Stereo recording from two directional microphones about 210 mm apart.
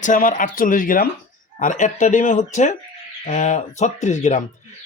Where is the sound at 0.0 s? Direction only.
40° left (ahead or behind).